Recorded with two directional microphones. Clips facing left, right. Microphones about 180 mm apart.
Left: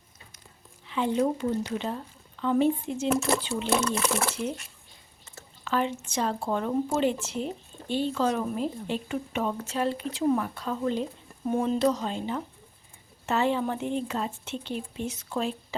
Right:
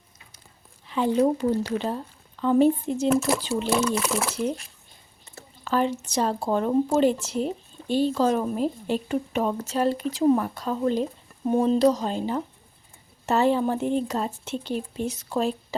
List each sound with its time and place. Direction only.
0.9 s speech: 40° right (ahead or behind)
2.4 s speech: 40° right (ahead or behind)
3.1 s speech: centre (ahead or behind)
5.3 s speech: 35° right (ahead or behind)